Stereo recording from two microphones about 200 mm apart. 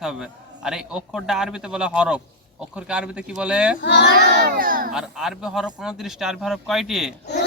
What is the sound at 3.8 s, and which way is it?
Speech, 60° left (ahead or behind).